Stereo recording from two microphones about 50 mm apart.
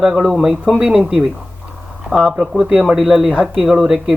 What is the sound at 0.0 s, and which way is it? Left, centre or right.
A man's voice, centre.